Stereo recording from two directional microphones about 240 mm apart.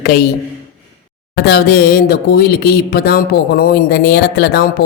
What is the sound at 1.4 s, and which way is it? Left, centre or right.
Speech, left.